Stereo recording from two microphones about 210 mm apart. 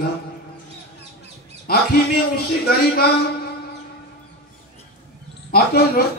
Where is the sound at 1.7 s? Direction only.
45° left (ahead or behind).